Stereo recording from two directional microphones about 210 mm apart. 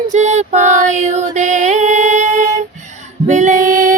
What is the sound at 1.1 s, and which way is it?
Music, 35° right (ahead or behind).